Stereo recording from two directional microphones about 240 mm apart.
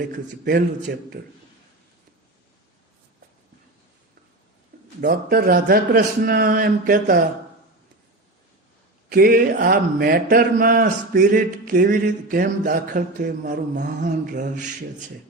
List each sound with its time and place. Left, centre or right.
0.1 s a man's voice: right
4.9 s a man's voice: right
9.0 s a man's voice: right